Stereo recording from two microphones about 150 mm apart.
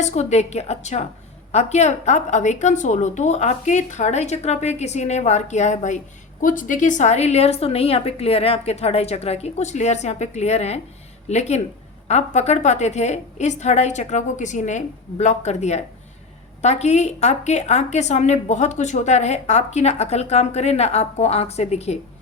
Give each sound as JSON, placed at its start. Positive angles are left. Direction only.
{"t": 0.0, "sound": "a woman's voice", "side_deg": 50}